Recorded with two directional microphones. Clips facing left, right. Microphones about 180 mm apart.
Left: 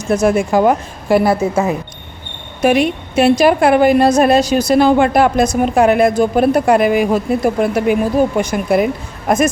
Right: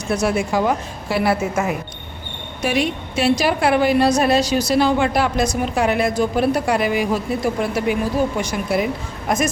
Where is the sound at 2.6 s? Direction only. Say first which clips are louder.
Left 7 dB; 55° left (ahead or behind).